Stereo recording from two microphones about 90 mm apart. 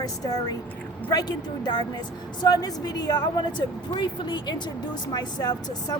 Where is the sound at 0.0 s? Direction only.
45° left (ahead or behind).